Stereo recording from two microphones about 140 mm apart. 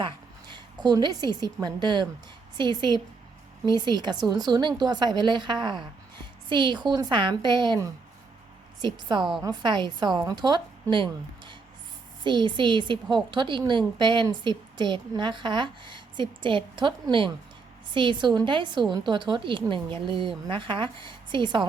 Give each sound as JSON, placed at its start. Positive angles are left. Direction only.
{"t": 0.5, "sound": "a woman's voice", "side_deg": -30}
{"t": 8.8, "sound": "a woman's voice", "side_deg": -30}